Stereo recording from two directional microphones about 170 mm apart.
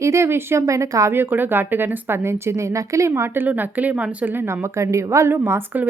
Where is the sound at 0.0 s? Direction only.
15° right (ahead or behind).